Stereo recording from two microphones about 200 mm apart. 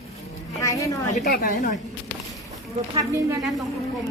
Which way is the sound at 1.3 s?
40° left (ahead or behind).